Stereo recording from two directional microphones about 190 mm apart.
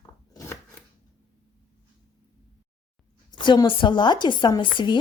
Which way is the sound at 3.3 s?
20° left (ahead or behind).